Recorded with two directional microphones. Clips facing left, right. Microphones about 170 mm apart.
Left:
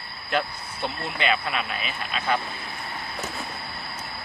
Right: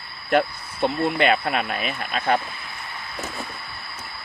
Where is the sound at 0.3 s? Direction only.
55° right (ahead or behind).